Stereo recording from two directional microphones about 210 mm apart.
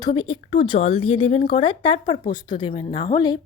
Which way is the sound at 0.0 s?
25° left (ahead or behind).